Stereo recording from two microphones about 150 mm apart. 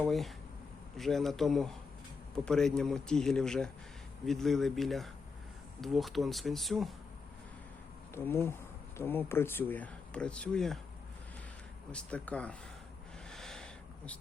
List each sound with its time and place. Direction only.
0.1 s speech: centre (ahead or behind)
8.1 s speech: 15° left (ahead or behind)
11.9 s speech: 5° left (ahead or behind)
13.3 s a sound: 5° left (ahead or behind)